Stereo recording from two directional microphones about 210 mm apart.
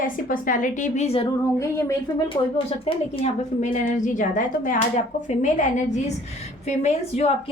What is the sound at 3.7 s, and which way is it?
A woman's voice, 35° left (ahead or behind).